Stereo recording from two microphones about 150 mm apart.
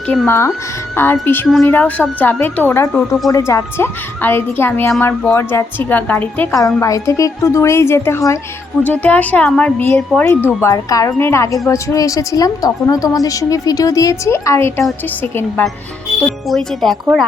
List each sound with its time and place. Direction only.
0.3 s a woman's voice: 15° left (ahead or behind)
6.5 s a woman's voice: 20° left (ahead or behind)
16.2 s speech: centre (ahead or behind)